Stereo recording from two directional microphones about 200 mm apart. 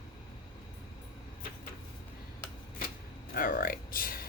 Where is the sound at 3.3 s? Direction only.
45° left (ahead or behind).